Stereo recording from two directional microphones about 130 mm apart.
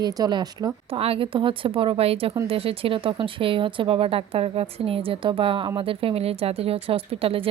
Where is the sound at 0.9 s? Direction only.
45° right (ahead or behind).